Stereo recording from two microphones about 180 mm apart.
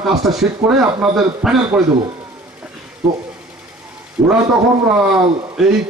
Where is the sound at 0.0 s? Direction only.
Centre (ahead or behind).